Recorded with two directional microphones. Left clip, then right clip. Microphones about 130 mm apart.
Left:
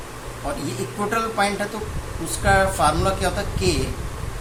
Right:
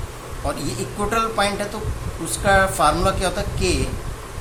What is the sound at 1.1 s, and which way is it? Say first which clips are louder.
Speech: right 2 dB; 35° right (ahead or behind).